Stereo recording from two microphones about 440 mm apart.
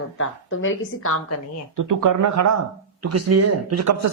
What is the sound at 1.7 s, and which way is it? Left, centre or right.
Speech, right.